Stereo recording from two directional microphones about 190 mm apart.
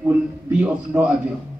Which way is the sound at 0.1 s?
5° right (ahead or behind).